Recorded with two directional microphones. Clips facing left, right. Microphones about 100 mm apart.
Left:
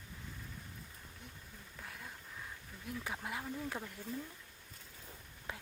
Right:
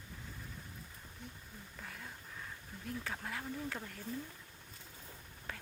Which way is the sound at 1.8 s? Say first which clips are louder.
Even; centre (ahead or behind).